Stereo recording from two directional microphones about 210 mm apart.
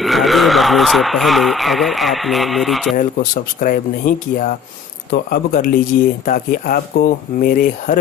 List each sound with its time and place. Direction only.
0.0 s speech: centre (ahead or behind)
3.0 s speech: 40° left (ahead or behind)